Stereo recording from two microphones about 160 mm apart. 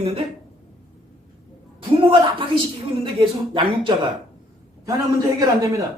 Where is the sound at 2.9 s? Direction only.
30° right (ahead or behind).